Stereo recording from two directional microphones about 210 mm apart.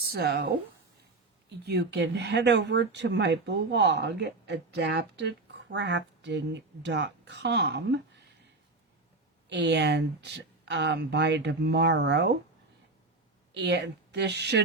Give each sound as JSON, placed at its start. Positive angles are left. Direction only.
{"t": 0.1, "sound": "speech", "side_deg": -50}
{"t": 9.5, "sound": "speech", "side_deg": -55}
{"t": 13.5, "sound": "a woman's voice", "side_deg": -55}